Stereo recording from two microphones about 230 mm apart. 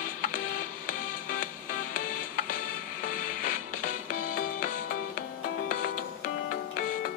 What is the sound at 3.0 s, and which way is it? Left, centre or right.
Music, left.